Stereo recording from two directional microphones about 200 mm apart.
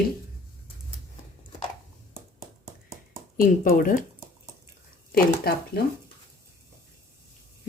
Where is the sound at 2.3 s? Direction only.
15° right (ahead or behind).